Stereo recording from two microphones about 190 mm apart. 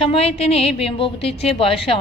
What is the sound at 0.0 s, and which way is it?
A woman's voice, 30° left (ahead or behind).